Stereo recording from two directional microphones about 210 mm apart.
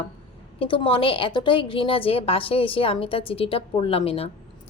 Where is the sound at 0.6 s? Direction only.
25° left (ahead or behind).